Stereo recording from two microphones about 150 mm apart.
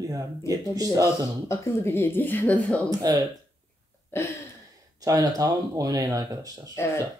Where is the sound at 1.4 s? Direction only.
20° left (ahead or behind).